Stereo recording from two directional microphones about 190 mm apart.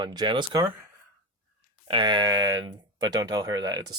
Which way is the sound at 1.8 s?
25° right (ahead or behind).